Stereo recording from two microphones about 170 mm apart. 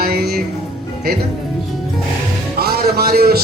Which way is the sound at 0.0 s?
65° right (ahead or behind).